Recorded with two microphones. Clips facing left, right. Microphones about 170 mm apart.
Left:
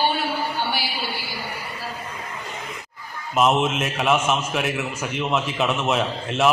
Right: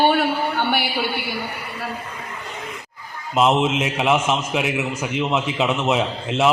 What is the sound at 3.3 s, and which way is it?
A man's voice, 15° right (ahead or behind).